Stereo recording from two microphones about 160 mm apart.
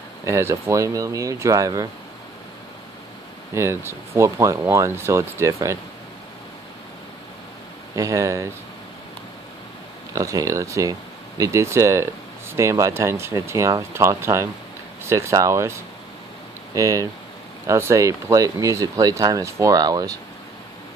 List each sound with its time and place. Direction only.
0.2 s speech: 15° right (ahead or behind)
3.5 s speech: 15° right (ahead or behind)
7.9 s speech: 20° right (ahead or behind)
10.1 s speech: 20° right (ahead or behind)